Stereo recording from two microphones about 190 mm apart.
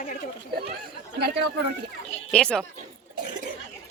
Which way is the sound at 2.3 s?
5° left (ahead or behind).